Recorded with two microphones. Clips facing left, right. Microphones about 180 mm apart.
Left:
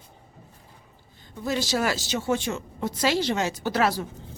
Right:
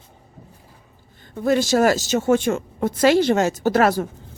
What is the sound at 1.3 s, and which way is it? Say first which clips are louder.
A woman's voice: right 8 dB; 55° right (ahead or behind).